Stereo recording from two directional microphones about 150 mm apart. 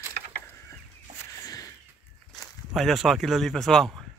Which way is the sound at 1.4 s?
25° left (ahead or behind).